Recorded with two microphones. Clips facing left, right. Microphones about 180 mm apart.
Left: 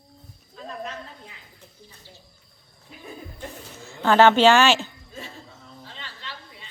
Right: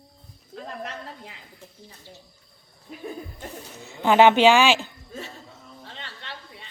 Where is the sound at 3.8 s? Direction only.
15° right (ahead or behind).